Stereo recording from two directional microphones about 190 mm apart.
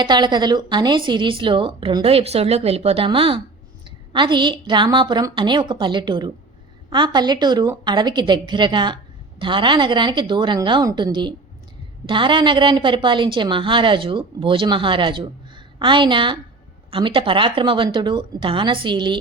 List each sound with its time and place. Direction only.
0.0 s a woman's voice: 25° right (ahead or behind)